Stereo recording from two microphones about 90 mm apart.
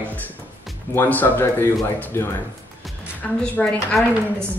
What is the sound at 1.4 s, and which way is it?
Speech, 30° left (ahead or behind).